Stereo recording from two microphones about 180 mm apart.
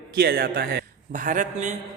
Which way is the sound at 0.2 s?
60° right (ahead or behind).